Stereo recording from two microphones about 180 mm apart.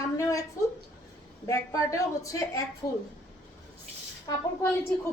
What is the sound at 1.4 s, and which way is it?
Speech, 15° left (ahead or behind).